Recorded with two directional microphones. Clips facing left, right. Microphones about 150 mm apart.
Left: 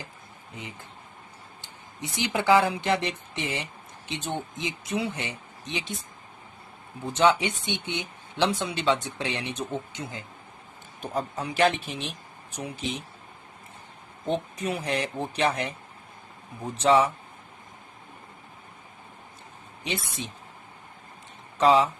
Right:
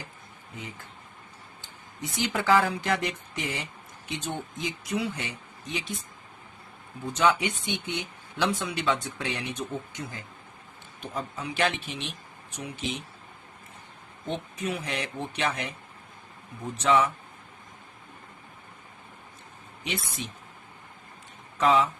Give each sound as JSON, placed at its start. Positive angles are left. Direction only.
{"t": 2.0, "sound": "speech", "side_deg": 20}
{"t": 7.0, "sound": "speech", "side_deg": 25}
{"t": 11.0, "sound": "speech", "side_deg": 40}
{"t": 14.3, "sound": "speech", "side_deg": 35}
{"t": 16.7, "sound": "speech", "side_deg": 30}
{"t": 21.6, "sound": "speech", "side_deg": 30}